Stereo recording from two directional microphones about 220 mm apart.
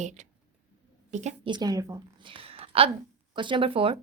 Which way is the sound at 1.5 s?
15° right (ahead or behind).